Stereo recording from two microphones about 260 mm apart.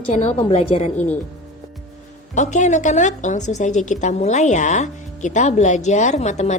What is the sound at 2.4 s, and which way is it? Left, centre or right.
A woman's voice, left.